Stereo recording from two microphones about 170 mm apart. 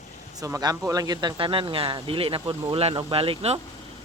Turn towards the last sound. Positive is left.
turn(degrees=-35)  # may be behind; listen again after turning